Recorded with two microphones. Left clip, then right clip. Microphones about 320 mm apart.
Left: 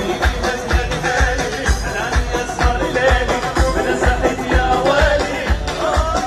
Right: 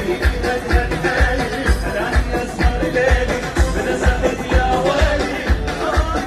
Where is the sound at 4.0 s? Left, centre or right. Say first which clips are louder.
Left 2 dB; left.